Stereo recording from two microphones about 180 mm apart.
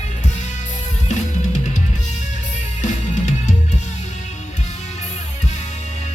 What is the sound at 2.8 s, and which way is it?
Music, 40° left (ahead or behind).